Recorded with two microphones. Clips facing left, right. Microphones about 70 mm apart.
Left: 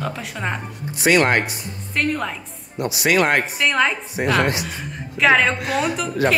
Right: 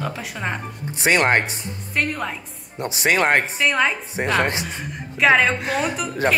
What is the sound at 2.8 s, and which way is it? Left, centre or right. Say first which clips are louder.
Speech: left 1 dB; right.